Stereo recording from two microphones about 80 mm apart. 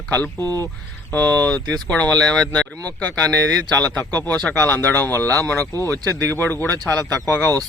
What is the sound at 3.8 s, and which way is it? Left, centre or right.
Speech, centre.